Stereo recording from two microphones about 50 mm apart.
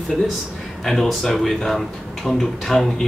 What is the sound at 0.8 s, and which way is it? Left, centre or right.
Speech, centre.